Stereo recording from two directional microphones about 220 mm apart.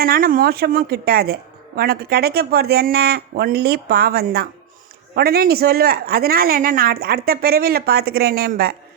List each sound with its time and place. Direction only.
0.0 s a woman's voice: 40° right (ahead or behind)